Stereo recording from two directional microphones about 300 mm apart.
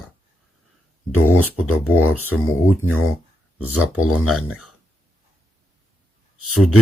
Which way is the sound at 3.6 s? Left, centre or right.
Left.